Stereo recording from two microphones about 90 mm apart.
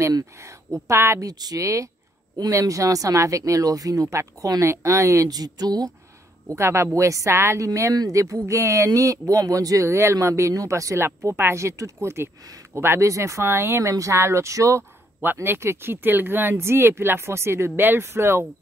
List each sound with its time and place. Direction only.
0.1 s a woman's voice: 35° right (ahead or behind)
1.2 s a woman's voice: 45° right (ahead or behind)
6.5 s a woman's voice: 30° right (ahead or behind)